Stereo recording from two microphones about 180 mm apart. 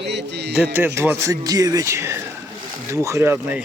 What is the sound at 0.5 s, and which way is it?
Speech, 10° right (ahead or behind).